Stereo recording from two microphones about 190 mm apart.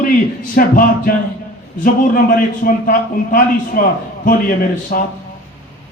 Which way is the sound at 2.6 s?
45° left (ahead or behind).